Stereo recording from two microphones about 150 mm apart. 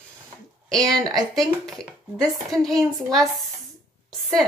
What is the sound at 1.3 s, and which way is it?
Speech, 5° left (ahead or behind).